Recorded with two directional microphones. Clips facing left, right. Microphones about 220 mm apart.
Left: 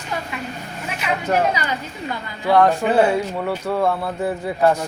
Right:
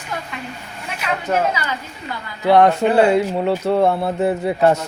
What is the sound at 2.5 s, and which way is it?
Speech, 20° right (ahead or behind).